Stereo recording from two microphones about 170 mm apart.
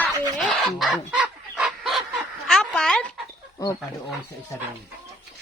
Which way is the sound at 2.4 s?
5° left (ahead or behind).